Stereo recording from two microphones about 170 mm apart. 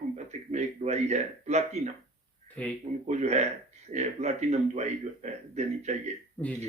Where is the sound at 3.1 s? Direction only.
45° right (ahead or behind).